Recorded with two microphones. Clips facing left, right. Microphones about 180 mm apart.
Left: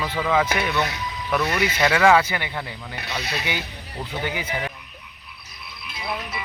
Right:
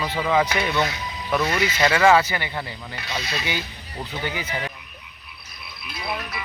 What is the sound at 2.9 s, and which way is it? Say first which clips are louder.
Speech: even; 60° left (ahead or behind).